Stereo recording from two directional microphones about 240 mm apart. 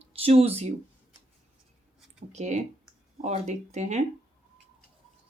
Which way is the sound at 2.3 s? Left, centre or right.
Right.